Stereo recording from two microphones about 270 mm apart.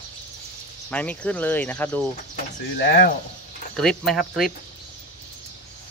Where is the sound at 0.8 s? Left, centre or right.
Centre.